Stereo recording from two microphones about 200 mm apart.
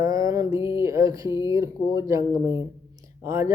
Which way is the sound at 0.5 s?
15° right (ahead or behind).